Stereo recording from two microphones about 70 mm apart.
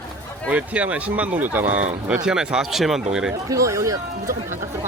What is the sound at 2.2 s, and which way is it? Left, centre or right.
Speech, centre.